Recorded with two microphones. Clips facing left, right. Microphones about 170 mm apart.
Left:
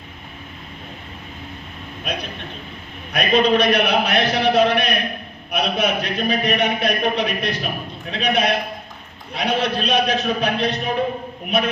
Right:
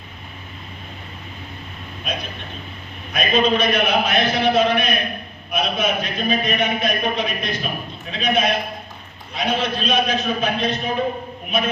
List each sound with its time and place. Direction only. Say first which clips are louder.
2.1 s a man's voice: left 1 dB; 70° left (ahead or behind)